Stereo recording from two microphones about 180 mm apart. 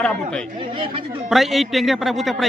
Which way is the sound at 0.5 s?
25° right (ahead or behind).